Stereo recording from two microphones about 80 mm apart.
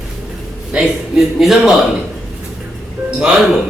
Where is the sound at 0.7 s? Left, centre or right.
Centre.